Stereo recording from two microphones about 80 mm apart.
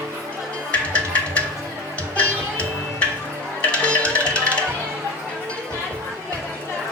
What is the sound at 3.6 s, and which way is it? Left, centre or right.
Music, centre.